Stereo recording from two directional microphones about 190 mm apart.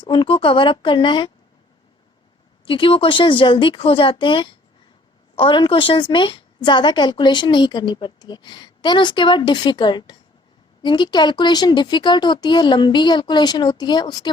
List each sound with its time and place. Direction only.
0.0 s a woman's voice: 25° left (ahead or behind)
2.6 s a woman's voice: 25° left (ahead or behind)